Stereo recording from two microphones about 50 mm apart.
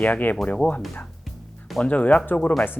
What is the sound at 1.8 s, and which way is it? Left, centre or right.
Speech, left.